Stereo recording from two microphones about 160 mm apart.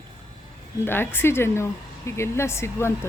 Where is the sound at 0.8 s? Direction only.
15° left (ahead or behind).